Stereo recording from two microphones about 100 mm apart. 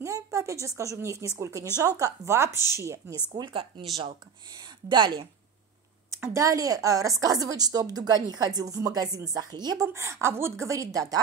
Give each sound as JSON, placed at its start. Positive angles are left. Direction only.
{"t": 0.0, "sound": "a woman's voice", "side_deg": -30}
{"t": 3.3, "sound": "speech", "side_deg": -55}
{"t": 6.2, "sound": "a woman's voice", "side_deg": -30}
{"t": 9.9, "sound": "a woman's voice", "side_deg": -30}